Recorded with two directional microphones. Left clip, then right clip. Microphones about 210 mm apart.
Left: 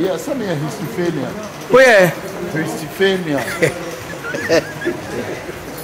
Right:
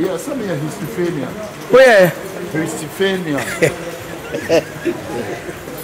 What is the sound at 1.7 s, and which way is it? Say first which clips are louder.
Speech: right 1 dB; 15° right (ahead or behind).